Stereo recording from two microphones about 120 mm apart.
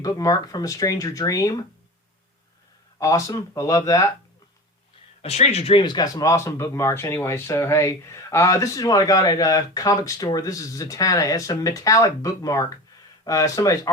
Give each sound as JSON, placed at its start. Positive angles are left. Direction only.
{"t": 0.0, "sound": "speech", "side_deg": 30}
{"t": 3.0, "sound": "speech", "side_deg": 30}
{"t": 5.2, "sound": "speech", "side_deg": 65}
{"t": 5.7, "sound": "speech", "side_deg": 35}